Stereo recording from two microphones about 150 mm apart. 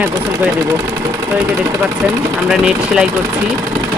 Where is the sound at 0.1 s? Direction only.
20° right (ahead or behind).